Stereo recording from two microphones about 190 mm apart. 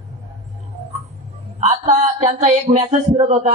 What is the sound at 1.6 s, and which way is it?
A man's voice, 40° right (ahead or behind).